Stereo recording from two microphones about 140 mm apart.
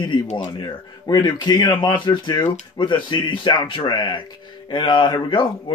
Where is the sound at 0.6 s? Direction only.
30° left (ahead or behind).